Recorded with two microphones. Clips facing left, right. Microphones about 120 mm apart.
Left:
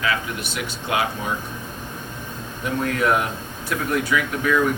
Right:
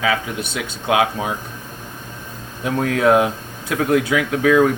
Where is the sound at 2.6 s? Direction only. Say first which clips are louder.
Right 5 dB; 90° right.